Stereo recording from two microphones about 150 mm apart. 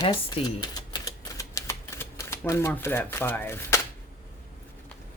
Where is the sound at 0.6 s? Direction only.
25° left (ahead or behind).